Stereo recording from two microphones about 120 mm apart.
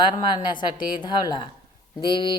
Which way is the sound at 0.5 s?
40° left (ahead or behind).